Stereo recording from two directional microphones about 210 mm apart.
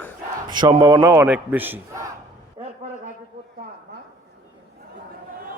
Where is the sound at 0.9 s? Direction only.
10° right (ahead or behind).